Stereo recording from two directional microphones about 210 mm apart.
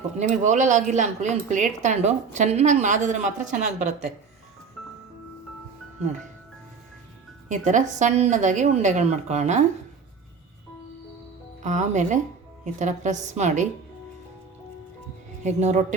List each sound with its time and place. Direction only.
0.2 s speech: 35° right (ahead or behind)
7.4 s speech: 35° right (ahead or behind)
11.6 s speech: 35° right (ahead or behind)
15.4 s speech: 35° right (ahead or behind)